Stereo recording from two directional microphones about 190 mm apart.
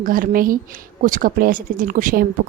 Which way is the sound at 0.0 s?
50° right (ahead or behind).